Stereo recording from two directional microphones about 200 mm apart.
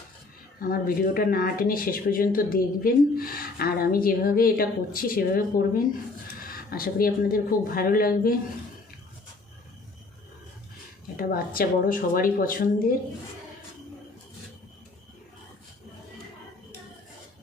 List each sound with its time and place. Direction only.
0.6 s speech: 45° left (ahead or behind)
11.2 s speech: 45° left (ahead or behind)